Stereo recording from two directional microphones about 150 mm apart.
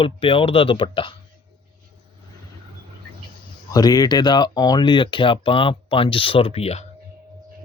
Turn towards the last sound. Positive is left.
turn(degrees=45)  # may be behind; listen again after turning